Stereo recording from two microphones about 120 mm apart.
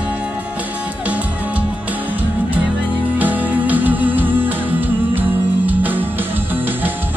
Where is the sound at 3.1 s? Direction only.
15° right (ahead or behind).